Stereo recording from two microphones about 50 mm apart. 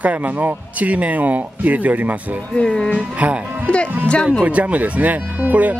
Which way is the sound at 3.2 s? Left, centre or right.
Right.